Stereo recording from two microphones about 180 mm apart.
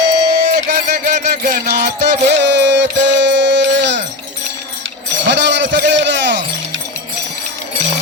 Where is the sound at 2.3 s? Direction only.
75° right (ahead or behind).